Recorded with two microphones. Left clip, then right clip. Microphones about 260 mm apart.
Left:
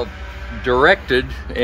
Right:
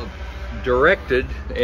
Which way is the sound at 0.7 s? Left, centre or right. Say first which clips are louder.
Left 3 dB; left.